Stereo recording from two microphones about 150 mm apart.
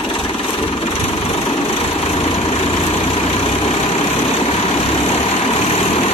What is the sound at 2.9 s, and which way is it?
Vehicle, 40° left (ahead or behind).